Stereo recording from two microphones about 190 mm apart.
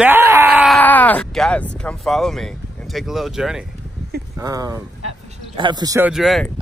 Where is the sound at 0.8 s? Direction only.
10° left (ahead or behind).